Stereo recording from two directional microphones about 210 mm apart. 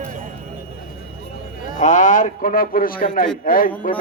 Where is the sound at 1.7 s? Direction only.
35° left (ahead or behind).